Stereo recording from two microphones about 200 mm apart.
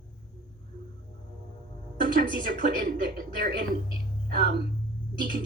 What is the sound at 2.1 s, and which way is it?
Speech, 50° right (ahead or behind).